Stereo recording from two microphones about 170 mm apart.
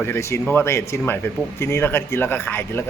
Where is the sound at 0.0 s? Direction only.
15° left (ahead or behind).